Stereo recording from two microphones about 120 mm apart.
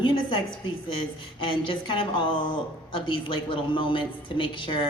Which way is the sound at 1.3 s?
45° left (ahead or behind).